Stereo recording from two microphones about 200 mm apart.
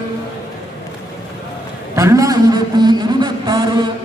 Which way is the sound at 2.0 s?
15° right (ahead or behind).